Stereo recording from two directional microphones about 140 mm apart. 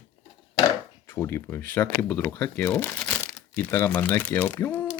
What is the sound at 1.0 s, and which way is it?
Speech, 15° left (ahead or behind).